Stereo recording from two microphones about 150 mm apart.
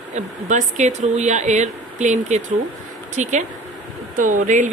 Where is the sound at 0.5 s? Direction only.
50° right (ahead or behind).